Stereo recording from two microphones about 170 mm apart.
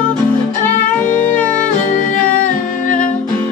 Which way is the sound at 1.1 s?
10° left (ahead or behind).